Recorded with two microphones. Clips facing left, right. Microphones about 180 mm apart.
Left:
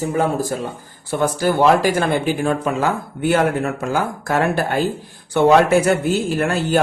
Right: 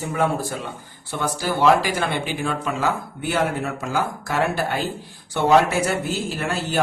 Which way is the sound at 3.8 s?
50° left (ahead or behind).